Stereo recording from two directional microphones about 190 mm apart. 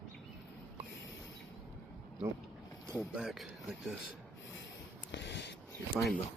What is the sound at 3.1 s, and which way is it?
Speech, centre (ahead or behind).